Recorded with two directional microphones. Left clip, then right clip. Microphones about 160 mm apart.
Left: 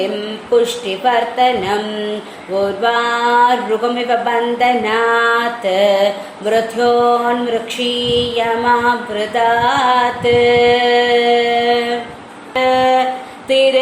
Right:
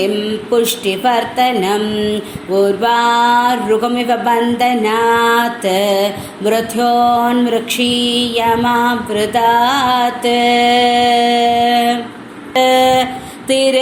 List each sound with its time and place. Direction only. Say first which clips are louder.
0.5 s a woman's voice: left 1 dB; 35° right (ahead or behind)
12.5 s a sound: right 2 dB; 45° right (ahead or behind)
13.5 s a woman's voice: left 1 dB; 40° right (ahead or behind)